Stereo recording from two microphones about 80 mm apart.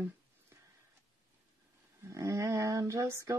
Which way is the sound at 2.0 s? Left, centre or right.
Right.